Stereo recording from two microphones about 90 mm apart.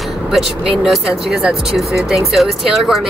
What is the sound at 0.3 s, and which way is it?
A woman's voice, 5° right (ahead or behind).